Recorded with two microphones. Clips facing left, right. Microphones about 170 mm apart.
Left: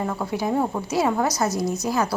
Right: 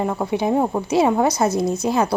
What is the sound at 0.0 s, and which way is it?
Speech, 20° right (ahead or behind).